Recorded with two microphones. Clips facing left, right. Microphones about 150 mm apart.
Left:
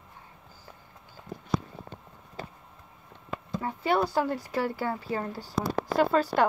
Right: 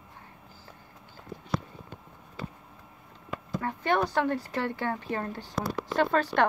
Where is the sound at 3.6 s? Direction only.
10° left (ahead or behind).